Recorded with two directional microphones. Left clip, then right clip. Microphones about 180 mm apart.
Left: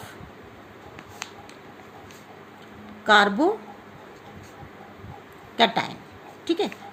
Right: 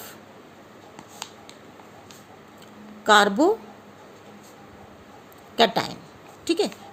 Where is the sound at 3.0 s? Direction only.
70° right (ahead or behind).